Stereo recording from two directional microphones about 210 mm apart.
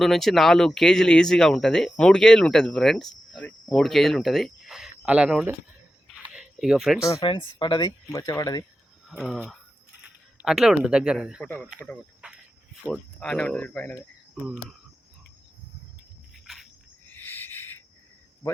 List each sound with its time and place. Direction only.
0.0 s speech: centre (ahead or behind)
6.3 s a sound: 5° right (ahead or behind)
7.0 s speech: 20° left (ahead or behind)
9.0 s speech: centre (ahead or behind)
12.2 s cricket: 5° right (ahead or behind)
12.8 s speech: centre (ahead or behind)
16.3 s cricket: centre (ahead or behind)
17.1 s owl: 10° left (ahead or behind)